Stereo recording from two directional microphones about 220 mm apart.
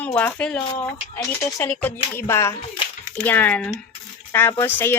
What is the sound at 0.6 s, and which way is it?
Speech, 20° left (ahead or behind).